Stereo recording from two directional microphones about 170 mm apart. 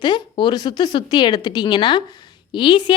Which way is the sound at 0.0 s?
25° left (ahead or behind).